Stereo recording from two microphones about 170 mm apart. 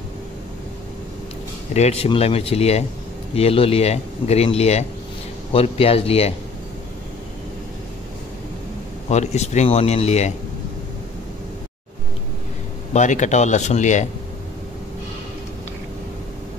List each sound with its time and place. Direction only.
1.7 s speech: 40° left (ahead or behind)
9.1 s speech: 40° left (ahead or behind)
12.9 s speech: 45° left (ahead or behind)